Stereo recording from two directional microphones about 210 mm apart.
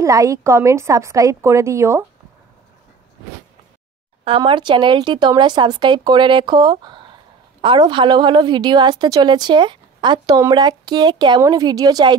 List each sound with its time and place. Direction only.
0.0 s a woman's voice: 15° right (ahead or behind)
4.4 s a woman's voice: 20° right (ahead or behind)